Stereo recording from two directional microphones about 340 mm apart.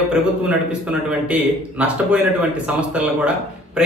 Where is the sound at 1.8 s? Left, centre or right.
Centre.